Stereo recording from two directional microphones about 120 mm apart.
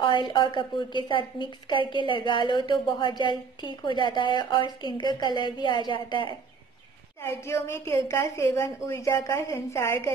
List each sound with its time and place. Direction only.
0.0 s a woman's voice: 40° left (ahead or behind)
7.2 s a woman's voice: 20° left (ahead or behind)